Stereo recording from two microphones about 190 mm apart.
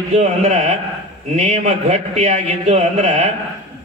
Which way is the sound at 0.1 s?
35° right (ahead or behind).